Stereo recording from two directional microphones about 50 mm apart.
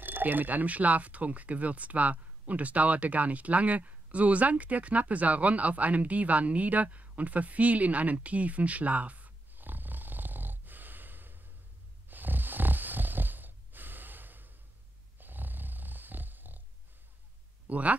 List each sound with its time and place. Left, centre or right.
0.0 s speech: right
12.1 s snoring: right
17.6 s speech: right